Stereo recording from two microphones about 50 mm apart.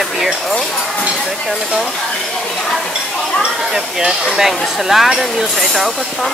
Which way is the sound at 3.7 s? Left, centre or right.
Centre.